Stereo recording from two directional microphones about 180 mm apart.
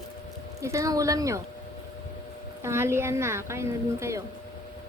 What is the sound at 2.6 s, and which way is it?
A woman's voice, 15° right (ahead or behind).